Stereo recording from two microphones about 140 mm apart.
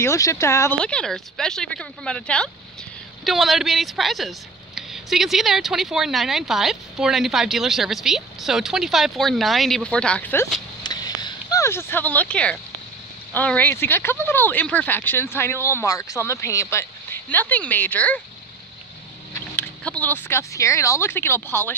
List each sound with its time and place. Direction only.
0.0 s speech: 20° left (ahead or behind)
0.7 s speech: 5° left (ahead or behind)
10.8 s a sound: 30° left (ahead or behind); by 12.5 s 10° left (ahead or behind)
13.3 s speech: 10° left (ahead or behind)
19.5 s speech: 10° left (ahead or behind)